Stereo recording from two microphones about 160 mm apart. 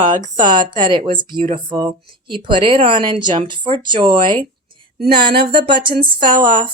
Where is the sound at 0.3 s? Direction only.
30° right (ahead or behind).